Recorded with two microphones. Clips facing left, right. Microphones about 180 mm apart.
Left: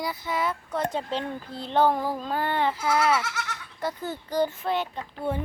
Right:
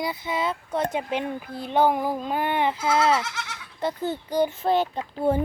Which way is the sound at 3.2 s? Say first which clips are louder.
Even; 5° left (ahead or behind).